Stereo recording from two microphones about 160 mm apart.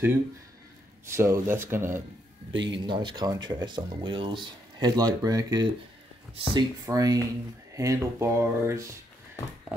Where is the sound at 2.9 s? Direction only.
30° right (ahead or behind).